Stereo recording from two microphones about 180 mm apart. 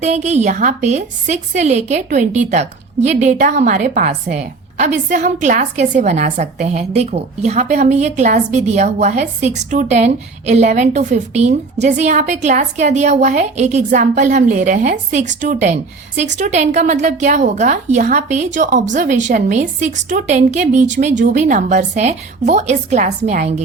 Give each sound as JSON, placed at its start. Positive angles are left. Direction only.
{"t": 0.0, "sound": "a woman's voice", "side_deg": -40}